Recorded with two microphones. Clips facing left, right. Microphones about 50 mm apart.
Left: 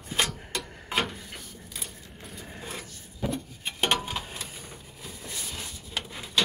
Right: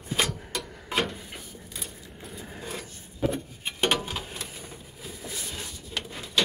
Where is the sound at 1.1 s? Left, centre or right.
Centre.